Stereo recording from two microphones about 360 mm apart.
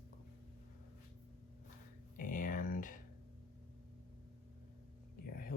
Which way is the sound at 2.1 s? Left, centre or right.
Left.